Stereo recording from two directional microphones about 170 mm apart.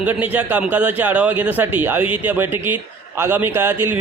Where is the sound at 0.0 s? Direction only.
10° right (ahead or behind).